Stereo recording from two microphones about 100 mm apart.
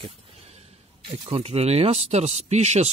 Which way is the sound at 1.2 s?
80° right.